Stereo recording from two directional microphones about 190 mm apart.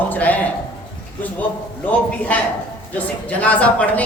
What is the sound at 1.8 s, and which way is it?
A woman's voice, 10° left (ahead or behind).